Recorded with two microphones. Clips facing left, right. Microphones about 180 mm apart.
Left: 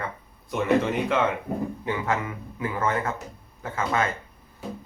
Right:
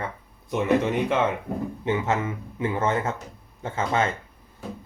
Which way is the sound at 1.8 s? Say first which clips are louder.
Right 6 dB; 25° right (ahead or behind).